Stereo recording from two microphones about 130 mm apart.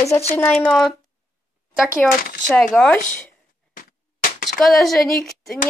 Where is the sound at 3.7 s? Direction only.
90° left.